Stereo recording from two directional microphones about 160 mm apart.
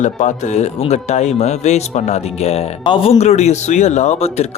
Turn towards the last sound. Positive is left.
turn(degrees=45)  # may be behind; listen again after turning